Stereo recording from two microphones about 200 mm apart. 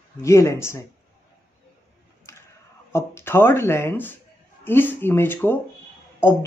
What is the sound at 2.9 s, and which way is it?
Speech, 15° left (ahead or behind).